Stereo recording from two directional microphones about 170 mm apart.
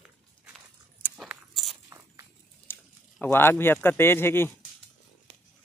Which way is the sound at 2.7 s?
15° left (ahead or behind).